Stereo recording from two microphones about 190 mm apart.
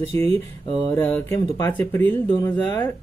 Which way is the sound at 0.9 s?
15° left (ahead or behind).